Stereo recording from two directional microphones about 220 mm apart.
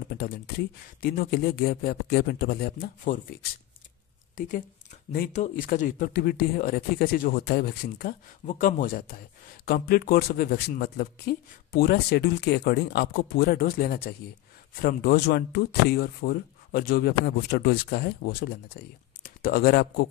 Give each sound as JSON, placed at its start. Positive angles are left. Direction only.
{"t": 0.1, "sound": "speech", "side_deg": 45}
{"t": 4.4, "sound": "speech", "side_deg": 35}